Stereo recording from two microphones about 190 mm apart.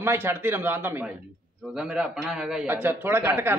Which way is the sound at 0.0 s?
10° right (ahead or behind).